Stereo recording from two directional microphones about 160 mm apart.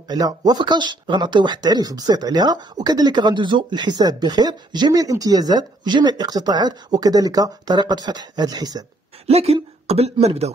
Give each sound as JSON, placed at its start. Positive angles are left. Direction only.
{"t": 0.1, "sound": "speech", "side_deg": -25}
{"t": 9.2, "sound": "speech", "side_deg": -40}